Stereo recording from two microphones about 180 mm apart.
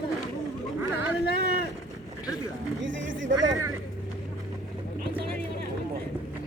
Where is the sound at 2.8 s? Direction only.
90° right.